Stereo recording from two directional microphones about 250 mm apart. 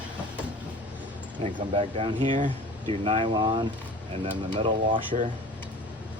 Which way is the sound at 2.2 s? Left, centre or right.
Right.